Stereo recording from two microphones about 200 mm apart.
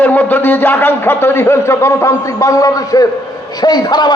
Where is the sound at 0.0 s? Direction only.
10° left (ahead or behind).